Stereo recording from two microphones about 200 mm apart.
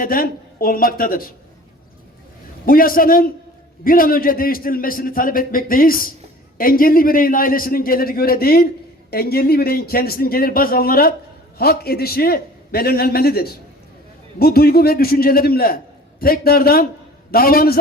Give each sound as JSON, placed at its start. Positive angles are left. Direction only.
{"t": 0.0, "sound": "a man's voice", "side_deg": 45}
{"t": 2.6, "sound": "a man's voice", "side_deg": 45}